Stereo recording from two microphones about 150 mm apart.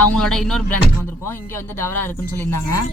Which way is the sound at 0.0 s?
5° left (ahead or behind).